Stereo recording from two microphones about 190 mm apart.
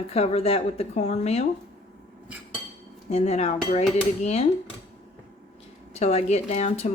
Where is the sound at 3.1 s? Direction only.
35° left (ahead or behind).